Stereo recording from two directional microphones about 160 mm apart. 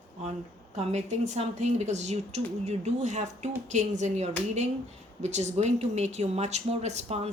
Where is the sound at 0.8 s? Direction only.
45° right (ahead or behind).